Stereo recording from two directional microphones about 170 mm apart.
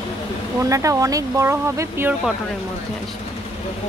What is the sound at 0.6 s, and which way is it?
Speech, 20° right (ahead or behind).